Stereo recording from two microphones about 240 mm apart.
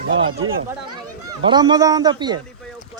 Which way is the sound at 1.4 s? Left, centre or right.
Centre.